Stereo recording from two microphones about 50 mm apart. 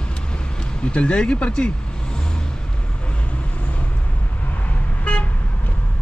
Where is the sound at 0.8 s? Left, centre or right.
Left.